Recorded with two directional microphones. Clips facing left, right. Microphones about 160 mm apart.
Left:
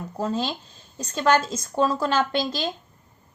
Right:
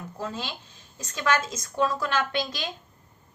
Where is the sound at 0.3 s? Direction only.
35° left (ahead or behind).